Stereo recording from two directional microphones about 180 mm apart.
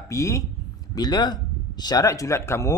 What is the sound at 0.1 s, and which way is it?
Speech, 15° left (ahead or behind).